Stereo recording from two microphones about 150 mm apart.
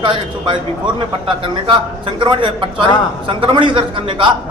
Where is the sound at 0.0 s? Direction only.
30° right (ahead or behind).